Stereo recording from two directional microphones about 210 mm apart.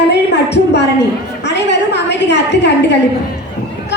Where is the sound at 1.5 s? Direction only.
55° left (ahead or behind).